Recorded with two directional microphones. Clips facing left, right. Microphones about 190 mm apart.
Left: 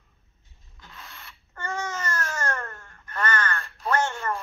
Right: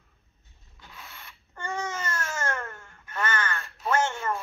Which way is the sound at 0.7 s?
10° right (ahead or behind).